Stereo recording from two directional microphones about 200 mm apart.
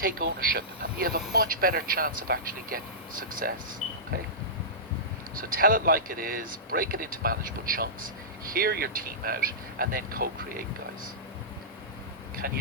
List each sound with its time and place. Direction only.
0.0 s speech: 45° right (ahead or behind)
5.4 s speech: 45° right (ahead or behind)